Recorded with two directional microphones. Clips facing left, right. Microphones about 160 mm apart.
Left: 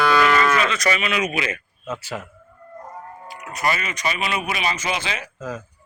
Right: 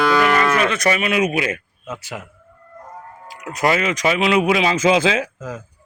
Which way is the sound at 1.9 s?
15° right (ahead or behind).